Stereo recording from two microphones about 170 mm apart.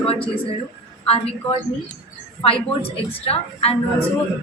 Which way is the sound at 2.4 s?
35° left (ahead or behind).